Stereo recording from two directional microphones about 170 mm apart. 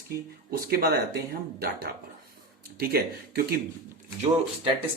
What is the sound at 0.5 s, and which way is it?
Speech, 65° right (ahead or behind).